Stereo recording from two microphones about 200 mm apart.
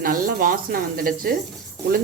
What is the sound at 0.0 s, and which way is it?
A woman's voice, 45° right (ahead or behind).